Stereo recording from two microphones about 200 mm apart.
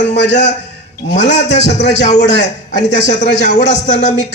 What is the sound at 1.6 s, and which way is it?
Speech, 35° left (ahead or behind).